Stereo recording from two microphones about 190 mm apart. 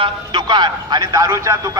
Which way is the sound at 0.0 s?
25° right (ahead or behind).